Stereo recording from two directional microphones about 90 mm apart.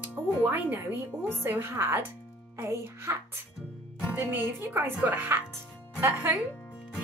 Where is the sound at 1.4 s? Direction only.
25° right (ahead or behind).